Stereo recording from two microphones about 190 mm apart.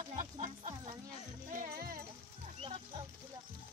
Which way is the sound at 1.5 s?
50° right (ahead or behind).